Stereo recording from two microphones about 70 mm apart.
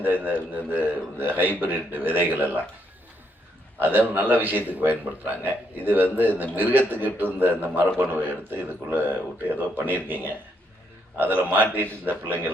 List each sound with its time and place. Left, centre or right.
0.0 s speech: right
3.8 s speech: right